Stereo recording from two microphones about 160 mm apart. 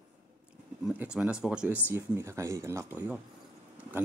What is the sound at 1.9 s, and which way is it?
Speech, 15° right (ahead or behind).